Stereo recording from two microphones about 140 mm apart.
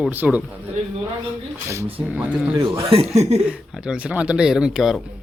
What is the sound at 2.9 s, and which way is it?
Speech, 45° right (ahead or behind).